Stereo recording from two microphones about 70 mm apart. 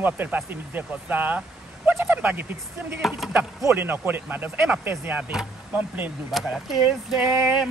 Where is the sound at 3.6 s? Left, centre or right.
Right.